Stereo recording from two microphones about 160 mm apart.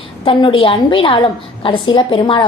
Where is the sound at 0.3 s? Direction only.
35° left (ahead or behind).